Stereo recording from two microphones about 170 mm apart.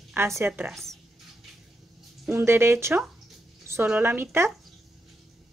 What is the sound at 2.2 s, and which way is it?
Speech, 15° right (ahead or behind).